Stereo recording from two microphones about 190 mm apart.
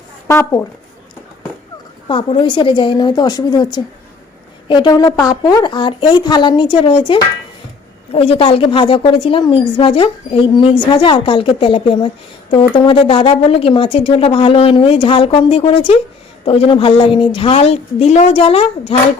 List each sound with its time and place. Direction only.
0.3 s speech: 15° left (ahead or behind)
2.0 s a woman's voice: 25° left (ahead or behind)